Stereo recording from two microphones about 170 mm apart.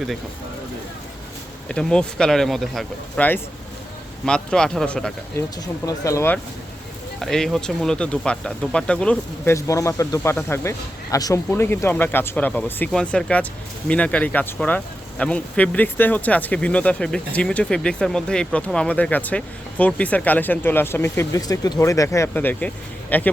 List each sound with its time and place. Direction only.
1.6 s speech: 5° left (ahead or behind)
5.4 s speech: 15° left (ahead or behind)
7.2 s speech: 5° left (ahead or behind)